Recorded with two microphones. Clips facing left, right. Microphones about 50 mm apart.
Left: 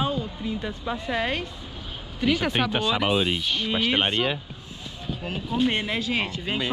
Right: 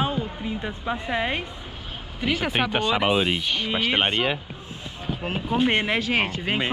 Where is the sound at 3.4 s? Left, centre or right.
Centre.